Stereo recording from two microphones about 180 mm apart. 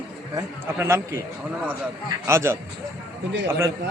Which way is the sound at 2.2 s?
15° right (ahead or behind).